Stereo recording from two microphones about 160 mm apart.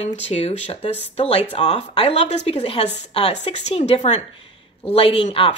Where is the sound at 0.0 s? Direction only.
40° left (ahead or behind).